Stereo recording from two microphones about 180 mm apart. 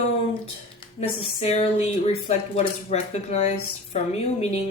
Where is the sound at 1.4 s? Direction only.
35° left (ahead or behind).